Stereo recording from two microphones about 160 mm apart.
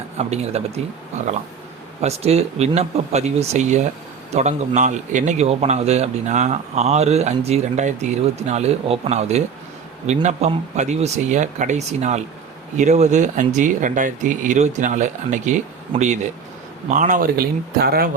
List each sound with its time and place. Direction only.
0.2 s speech: 40° right (ahead or behind)
2.0 s a man's voice: 40° right (ahead or behind); by 18.1 s 75° right (ahead or behind)